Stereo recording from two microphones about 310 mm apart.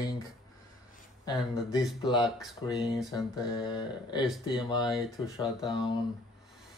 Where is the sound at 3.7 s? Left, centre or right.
Centre.